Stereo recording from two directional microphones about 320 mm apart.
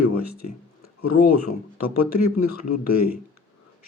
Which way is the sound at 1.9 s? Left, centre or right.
Left.